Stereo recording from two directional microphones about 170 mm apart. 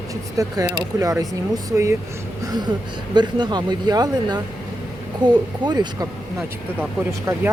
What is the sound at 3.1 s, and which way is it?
Speech, 25° right (ahead or behind).